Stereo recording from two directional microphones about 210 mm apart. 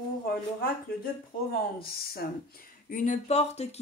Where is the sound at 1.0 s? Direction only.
45° left (ahead or behind).